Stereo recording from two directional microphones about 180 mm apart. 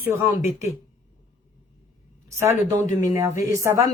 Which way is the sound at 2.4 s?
15° right (ahead or behind).